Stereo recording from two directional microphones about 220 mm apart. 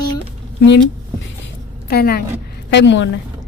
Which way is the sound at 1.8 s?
45° left (ahead or behind).